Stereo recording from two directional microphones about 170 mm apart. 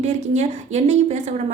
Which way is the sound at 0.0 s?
45° right (ahead or behind).